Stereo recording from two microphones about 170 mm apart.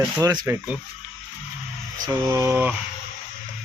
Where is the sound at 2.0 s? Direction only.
20° right (ahead or behind).